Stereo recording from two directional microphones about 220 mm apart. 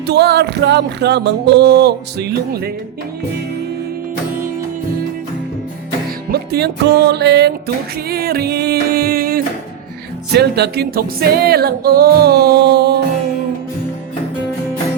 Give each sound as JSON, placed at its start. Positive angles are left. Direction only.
{"t": 0.1, "sound": "music", "side_deg": -50}
{"t": 6.3, "sound": "music", "side_deg": -50}